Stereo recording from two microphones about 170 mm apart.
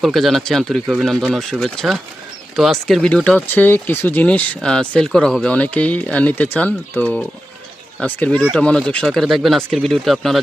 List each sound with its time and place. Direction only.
0.0 s speech: centre (ahead or behind)
8.4 s speech: 5° right (ahead or behind)